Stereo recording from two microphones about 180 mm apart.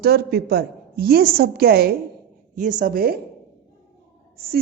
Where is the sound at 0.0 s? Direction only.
60° right (ahead or behind).